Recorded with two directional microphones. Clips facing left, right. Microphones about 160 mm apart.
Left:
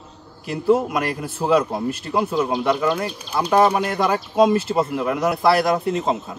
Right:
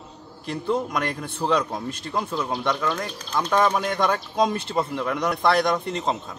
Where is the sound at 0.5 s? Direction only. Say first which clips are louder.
Left 7 dB; 5° left (ahead or behind).